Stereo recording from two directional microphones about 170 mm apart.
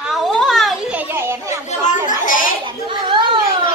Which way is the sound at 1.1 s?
15° right (ahead or behind).